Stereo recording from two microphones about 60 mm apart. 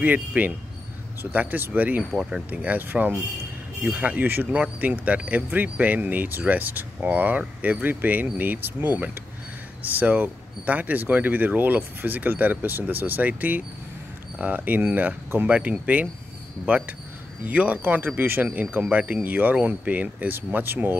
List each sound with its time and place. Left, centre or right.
0.0 s speech: right